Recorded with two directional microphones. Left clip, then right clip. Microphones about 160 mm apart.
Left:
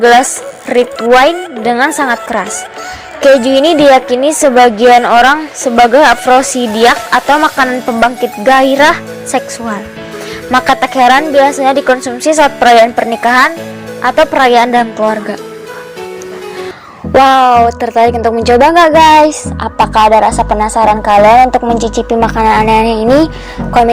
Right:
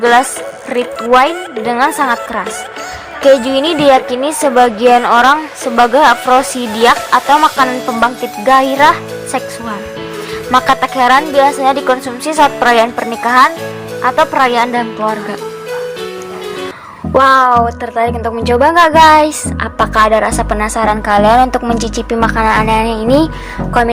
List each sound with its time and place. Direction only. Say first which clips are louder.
0.7 s a woman's voice: left 3 dB; 25° left (ahead or behind)
17.1 s a woman's voice: left 2 dB; 20° left (ahead or behind)
17.7 s a woman's voice: left 6 dB; 35° left (ahead or behind)
19.5 s a woman's voice: left 1 dB; 5° left (ahead or behind)
22.4 s a woman's voice: left 4 dB; 25° left (ahead or behind)